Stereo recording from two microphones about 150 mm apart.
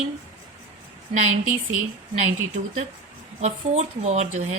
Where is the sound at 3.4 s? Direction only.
50° right (ahead or behind).